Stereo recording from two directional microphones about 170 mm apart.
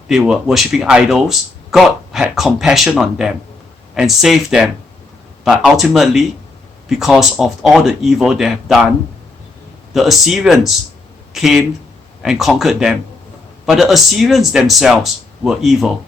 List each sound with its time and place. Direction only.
0.1 s speech: 5° right (ahead or behind)
9.9 s speech: centre (ahead or behind)